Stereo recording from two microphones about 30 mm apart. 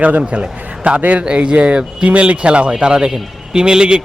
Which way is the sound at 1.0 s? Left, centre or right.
Right.